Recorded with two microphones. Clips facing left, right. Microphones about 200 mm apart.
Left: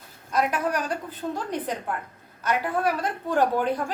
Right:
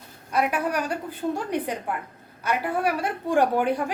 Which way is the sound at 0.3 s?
10° right (ahead or behind).